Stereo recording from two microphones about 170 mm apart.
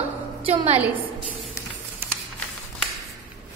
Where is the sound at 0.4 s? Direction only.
35° right (ahead or behind).